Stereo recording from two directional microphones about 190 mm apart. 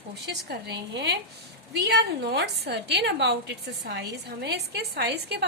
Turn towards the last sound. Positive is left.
turn(degrees=-60)  # may be behind; listen again after turning